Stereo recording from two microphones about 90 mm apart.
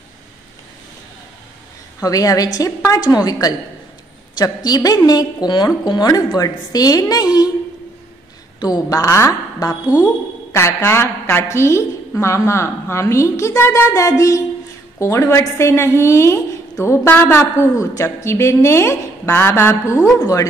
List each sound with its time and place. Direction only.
2.0 s a woman's voice: 40° left (ahead or behind)
8.8 s a woman's voice: 35° left (ahead or behind)
20.2 s a woman's voice: 40° left (ahead or behind)